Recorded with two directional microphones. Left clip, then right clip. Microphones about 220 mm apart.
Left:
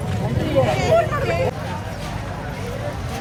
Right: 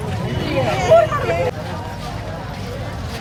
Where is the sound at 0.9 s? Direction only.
10° right (ahead or behind).